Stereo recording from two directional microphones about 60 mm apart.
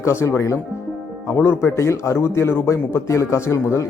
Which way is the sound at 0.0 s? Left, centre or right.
Left.